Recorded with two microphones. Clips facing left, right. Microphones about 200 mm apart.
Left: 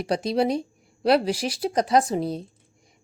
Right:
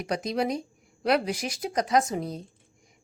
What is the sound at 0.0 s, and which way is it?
A woman's voice, 30° left (ahead or behind).